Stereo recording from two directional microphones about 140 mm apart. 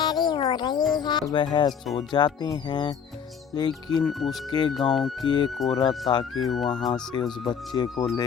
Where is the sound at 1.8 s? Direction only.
Centre (ahead or behind).